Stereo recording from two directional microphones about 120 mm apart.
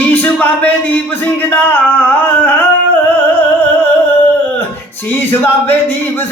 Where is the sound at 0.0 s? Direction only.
15° left (ahead or behind).